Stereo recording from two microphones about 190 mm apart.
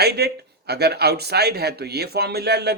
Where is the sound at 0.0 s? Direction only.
60° right (ahead or behind).